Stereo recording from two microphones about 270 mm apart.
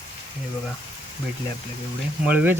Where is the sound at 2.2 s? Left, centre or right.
Centre.